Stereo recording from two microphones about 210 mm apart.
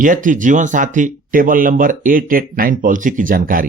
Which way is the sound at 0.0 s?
40° right (ahead or behind).